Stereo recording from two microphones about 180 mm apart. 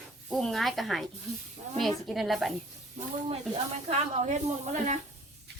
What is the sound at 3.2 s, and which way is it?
Speech, 35° right (ahead or behind).